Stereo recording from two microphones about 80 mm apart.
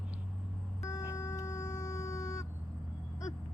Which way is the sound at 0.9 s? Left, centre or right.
Left.